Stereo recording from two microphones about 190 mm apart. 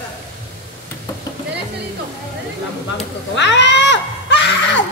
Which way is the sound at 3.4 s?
65° left (ahead or behind).